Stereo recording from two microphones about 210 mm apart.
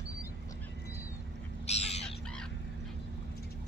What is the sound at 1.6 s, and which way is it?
Bird, 30° left (ahead or behind).